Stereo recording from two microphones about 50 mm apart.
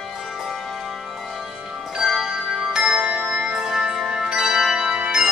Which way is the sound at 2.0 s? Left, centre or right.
Centre.